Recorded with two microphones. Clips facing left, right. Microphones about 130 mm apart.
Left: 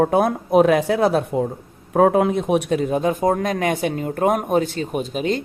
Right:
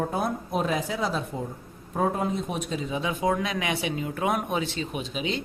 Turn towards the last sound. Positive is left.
turn(degrees=45)  # may be behind; listen again after turning